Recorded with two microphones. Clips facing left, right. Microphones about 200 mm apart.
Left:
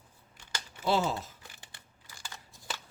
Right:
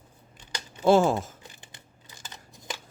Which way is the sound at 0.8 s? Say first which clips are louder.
Right 9 dB; 50° right (ahead or behind).